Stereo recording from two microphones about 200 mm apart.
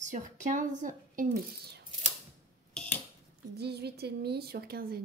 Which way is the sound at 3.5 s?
55° right (ahead or behind).